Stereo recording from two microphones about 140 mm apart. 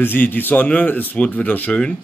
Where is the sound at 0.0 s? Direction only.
15° left (ahead or behind).